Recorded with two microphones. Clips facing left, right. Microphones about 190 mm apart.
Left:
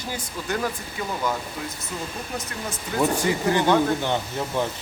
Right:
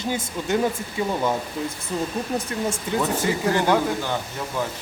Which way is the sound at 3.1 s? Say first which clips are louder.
Even; 15° left (ahead or behind).